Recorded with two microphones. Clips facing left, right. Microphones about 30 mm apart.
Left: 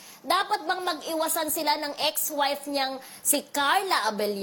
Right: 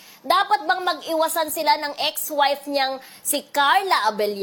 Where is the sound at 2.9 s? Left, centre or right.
Right.